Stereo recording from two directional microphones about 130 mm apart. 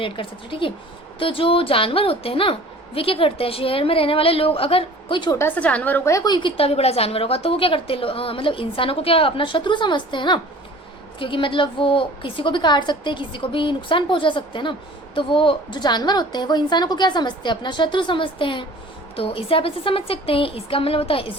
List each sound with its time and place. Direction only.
0.0 s a woman's voice: 40° left (ahead or behind)
5.3 s a woman's voice: 15° left (ahead or behind)
6.1 s a woman's voice: 35° left (ahead or behind)